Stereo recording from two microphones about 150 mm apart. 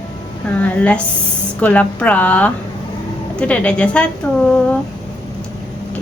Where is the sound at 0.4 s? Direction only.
10° left (ahead or behind).